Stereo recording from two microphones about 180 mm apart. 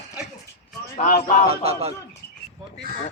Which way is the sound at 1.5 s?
35° right (ahead or behind).